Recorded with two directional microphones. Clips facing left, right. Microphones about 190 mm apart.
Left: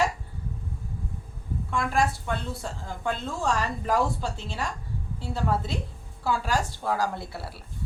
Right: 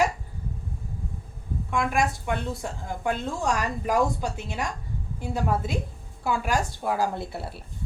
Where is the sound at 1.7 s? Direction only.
15° right (ahead or behind).